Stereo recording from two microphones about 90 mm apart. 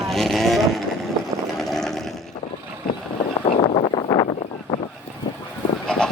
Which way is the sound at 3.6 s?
80° left.